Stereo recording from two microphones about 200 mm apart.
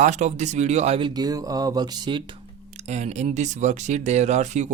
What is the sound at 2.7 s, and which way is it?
Speech, 35° right (ahead or behind).